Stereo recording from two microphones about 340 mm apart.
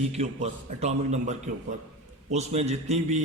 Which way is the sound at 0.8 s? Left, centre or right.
Centre.